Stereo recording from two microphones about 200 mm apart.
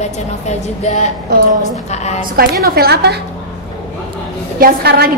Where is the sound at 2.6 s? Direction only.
50° right (ahead or behind).